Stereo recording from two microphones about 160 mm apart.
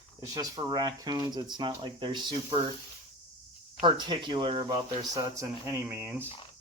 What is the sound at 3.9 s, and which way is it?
Speech, 30° right (ahead or behind).